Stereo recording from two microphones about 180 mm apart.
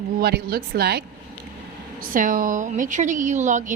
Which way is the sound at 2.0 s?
50° right (ahead or behind).